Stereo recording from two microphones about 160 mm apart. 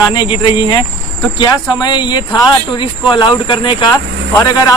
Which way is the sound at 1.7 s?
25° left (ahead or behind).